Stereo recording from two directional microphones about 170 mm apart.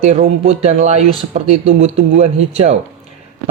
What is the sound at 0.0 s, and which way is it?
Speech, 40° right (ahead or behind).